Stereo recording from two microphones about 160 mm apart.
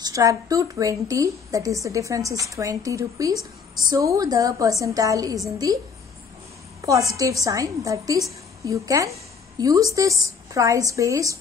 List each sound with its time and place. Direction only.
0.0 s a woman's voice: 20° right (ahead or behind)